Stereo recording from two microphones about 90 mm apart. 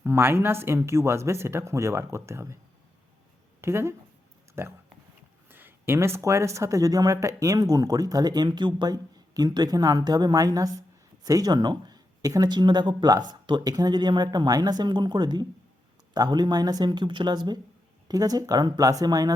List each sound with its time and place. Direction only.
0.0 s speech: 25° right (ahead or behind)
3.6 s speech: 30° right (ahead or behind); by 13.1 s 55° right (ahead or behind)
13.1 s speech: 40° right (ahead or behind)